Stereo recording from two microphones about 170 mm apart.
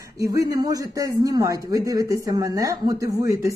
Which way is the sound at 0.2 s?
20° right (ahead or behind).